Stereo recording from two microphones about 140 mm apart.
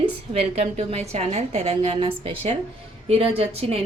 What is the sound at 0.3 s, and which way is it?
A woman's voice, 50° right (ahead or behind).